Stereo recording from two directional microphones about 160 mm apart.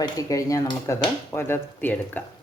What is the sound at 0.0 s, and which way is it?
Speech, 20° left (ahead or behind).